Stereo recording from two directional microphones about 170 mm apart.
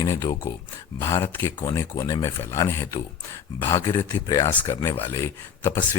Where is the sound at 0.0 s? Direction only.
20° left (ahead or behind).